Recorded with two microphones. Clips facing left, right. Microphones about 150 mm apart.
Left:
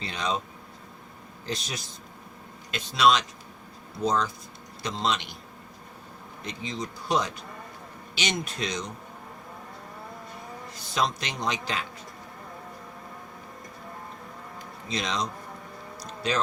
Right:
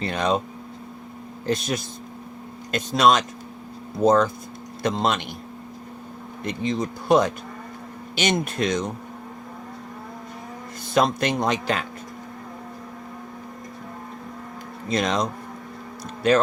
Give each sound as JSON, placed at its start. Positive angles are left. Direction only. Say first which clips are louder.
{"t": 0.0, "sound": "speech", "louder": "right 7 dB", "side_deg": -55}
{"t": 1.5, "sound": "speech", "louder": "right 10 dB", "side_deg": -55}
{"t": 6.4, "sound": "speech", "louder": "right 9 dB", "side_deg": -55}
{"t": 10.9, "sound": "speech", "louder": "right 8 dB", "side_deg": -55}
{"t": 14.8, "sound": "speech", "louder": "right 7 dB", "side_deg": -50}